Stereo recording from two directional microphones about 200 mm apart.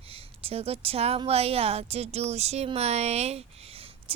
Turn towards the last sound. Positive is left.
turn(degrees=-30)  # may be behind; listen again after turning